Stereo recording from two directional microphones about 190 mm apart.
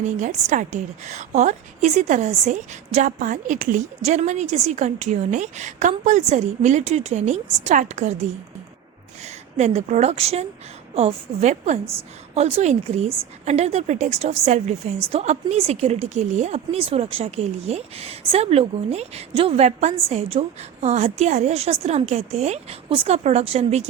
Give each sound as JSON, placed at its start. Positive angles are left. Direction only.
{"t": 0.0, "sound": "a woman's voice", "side_deg": -40}
{"t": 9.2, "sound": "a woman's voice", "side_deg": -35}